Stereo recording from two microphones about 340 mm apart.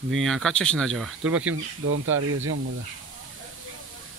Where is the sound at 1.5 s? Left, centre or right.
Right.